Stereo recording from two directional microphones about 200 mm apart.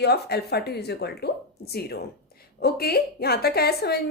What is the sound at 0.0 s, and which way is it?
A woman's voice, 55° left (ahead or behind).